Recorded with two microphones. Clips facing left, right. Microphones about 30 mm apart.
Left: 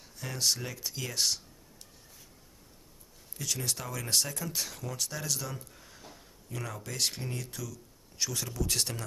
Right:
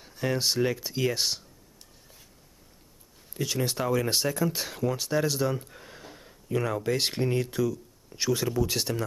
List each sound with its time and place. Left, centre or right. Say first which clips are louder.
0.0 s speech: right 5 dB; right
3.3 s speech: right 7 dB; right
8.6 s speech: right 4 dB; centre